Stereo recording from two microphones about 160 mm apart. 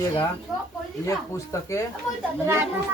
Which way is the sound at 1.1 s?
20° left (ahead or behind).